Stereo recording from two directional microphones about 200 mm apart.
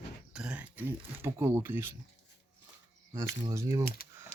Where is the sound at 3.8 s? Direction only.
50° left (ahead or behind).